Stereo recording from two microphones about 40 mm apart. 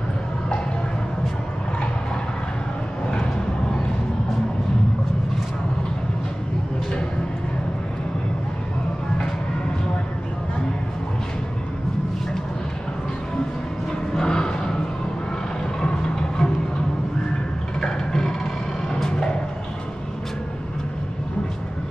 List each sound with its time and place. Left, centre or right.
14.1 s a sound: centre
15.8 s music: centre
17.7 s music: centre
18.9 s vehicle: centre